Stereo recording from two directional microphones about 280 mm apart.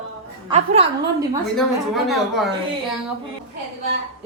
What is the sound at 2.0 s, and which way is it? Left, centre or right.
Speech, centre.